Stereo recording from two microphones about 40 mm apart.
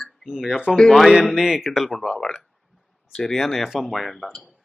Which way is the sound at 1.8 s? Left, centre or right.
Centre.